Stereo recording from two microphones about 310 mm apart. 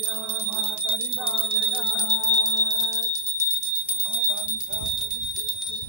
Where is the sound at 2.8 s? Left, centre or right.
Centre.